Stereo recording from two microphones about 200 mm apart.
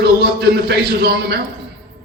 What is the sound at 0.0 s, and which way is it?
A man's voice, 55° right (ahead or behind).